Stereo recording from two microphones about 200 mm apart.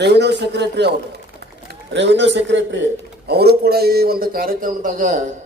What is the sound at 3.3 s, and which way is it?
A man's voice, 55° right (ahead or behind).